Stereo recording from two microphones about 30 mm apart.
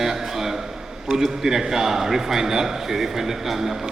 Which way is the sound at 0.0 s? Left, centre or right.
Centre.